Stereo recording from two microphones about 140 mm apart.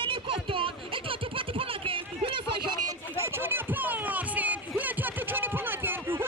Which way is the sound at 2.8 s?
15° right (ahead or behind).